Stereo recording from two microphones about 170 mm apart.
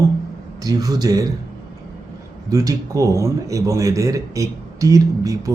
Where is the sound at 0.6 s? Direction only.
20° right (ahead or behind).